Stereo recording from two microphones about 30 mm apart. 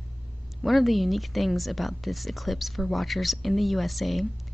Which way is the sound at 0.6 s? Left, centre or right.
Centre.